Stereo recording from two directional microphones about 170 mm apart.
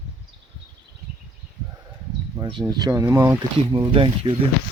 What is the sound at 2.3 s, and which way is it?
Speech, 25° right (ahead or behind).